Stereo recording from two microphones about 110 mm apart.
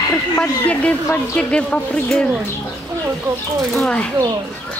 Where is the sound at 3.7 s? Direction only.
5° left (ahead or behind).